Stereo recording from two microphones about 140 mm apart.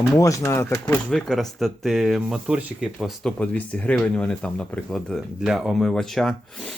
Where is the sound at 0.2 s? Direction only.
20° left (ahead or behind).